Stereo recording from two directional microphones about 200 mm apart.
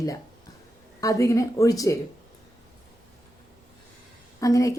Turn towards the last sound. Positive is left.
turn(degrees=15)  # may be behind; listen again after turning